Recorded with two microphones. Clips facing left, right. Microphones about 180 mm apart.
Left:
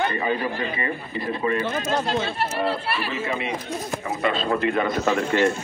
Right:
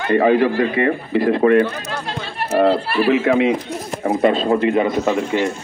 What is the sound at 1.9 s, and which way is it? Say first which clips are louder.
Speech: left 4 dB; 20° left (ahead or behind).